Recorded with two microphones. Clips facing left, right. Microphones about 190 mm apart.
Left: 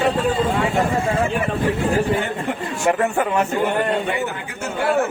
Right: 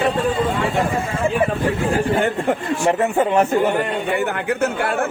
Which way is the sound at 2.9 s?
25° right (ahead or behind).